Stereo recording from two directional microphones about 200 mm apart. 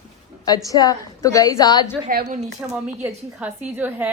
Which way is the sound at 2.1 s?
40° right (ahead or behind).